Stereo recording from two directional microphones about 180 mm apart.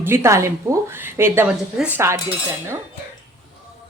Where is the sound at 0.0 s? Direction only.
15° right (ahead or behind).